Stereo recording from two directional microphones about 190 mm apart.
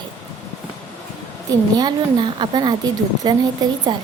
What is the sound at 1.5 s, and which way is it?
A woman's voice, 20° right (ahead or behind).